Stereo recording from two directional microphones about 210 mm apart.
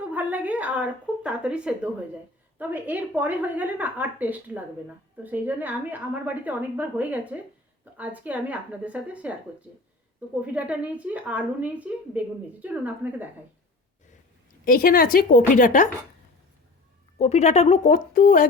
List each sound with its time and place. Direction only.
0.1 s a woman's voice: 10° right (ahead or behind)
14.6 s a woman's voice: 45° left (ahead or behind)
17.2 s speech: 30° left (ahead or behind)